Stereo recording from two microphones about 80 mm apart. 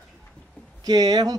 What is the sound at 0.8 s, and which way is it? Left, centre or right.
Speech, right.